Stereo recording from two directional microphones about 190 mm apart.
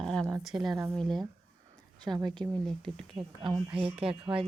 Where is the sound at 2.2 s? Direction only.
25° right (ahead or behind).